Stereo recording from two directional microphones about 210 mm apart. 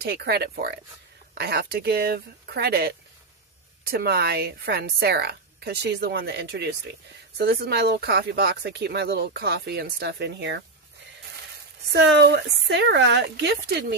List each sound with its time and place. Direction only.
0.0 s speech: 50° right (ahead or behind)
11.9 s speech: 55° right (ahead or behind)